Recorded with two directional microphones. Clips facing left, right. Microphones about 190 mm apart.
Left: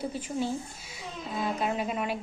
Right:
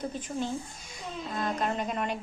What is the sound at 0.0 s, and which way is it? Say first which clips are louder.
A woman's voice: left 2 dB; 10° left (ahead or behind).